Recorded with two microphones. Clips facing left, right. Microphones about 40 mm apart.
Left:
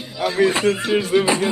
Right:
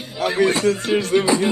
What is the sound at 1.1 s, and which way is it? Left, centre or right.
Music, centre.